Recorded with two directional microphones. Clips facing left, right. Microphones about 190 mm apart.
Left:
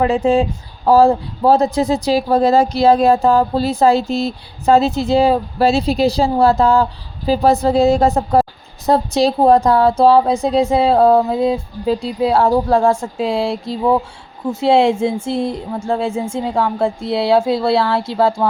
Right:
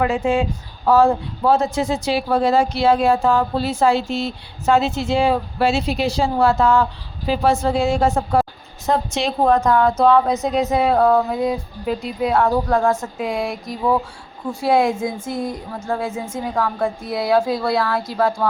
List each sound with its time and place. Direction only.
0.0 s a woman's voice: 35° left (ahead or behind)